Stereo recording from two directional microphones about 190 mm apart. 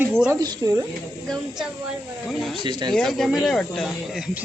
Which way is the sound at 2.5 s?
25° right (ahead or behind).